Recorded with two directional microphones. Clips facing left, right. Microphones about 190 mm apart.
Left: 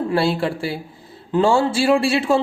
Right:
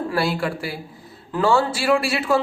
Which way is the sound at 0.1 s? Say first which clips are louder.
Left 4 dB; 25° left (ahead or behind).